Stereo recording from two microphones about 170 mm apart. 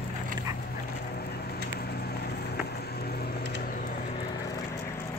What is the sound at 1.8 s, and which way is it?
Vehicle, 70° left (ahead or behind).